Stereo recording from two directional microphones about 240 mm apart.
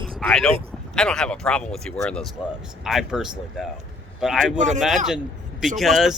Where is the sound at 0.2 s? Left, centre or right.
Centre.